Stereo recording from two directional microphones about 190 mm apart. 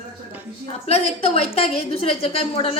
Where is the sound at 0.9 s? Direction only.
30° left (ahead or behind).